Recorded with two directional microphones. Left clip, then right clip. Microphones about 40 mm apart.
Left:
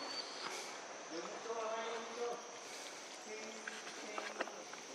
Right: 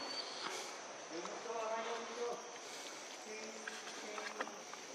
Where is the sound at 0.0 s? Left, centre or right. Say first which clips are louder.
Right 1 dB; centre.